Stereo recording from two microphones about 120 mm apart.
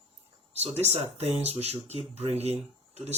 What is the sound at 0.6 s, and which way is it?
Speech, 60° right (ahead or behind).